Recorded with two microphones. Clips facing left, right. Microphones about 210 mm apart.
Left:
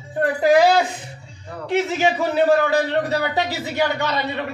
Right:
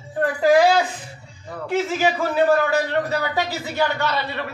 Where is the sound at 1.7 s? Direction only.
20° left (ahead or behind).